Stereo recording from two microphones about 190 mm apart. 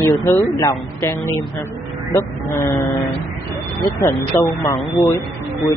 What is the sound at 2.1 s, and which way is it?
Vehicle, 15° left (ahead or behind).